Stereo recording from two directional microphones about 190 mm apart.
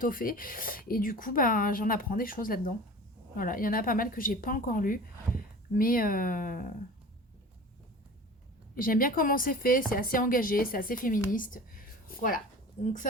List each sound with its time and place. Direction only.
0.0 s speech: 50° left (ahead or behind)
8.7 s a woman's voice: 50° left (ahead or behind)